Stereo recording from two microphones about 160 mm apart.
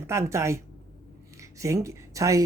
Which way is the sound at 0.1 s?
20° right (ahead or behind).